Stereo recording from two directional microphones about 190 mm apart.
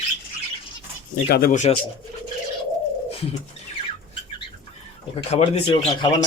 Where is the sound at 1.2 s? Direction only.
55° left (ahead or behind).